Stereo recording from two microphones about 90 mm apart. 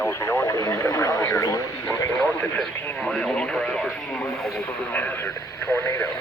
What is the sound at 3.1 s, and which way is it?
Speech, 10° left (ahead or behind).